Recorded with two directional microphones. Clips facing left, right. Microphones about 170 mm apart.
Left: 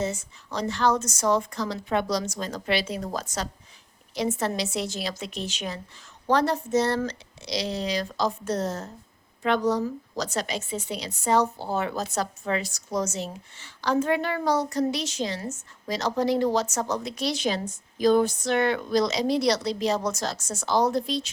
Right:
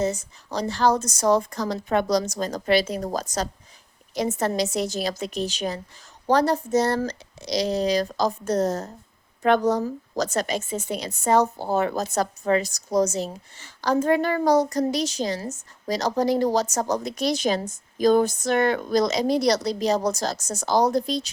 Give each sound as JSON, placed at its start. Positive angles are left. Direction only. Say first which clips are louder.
{"t": 0.0, "sound": "a woman's voice", "louder": "right 4 dB", "side_deg": -40}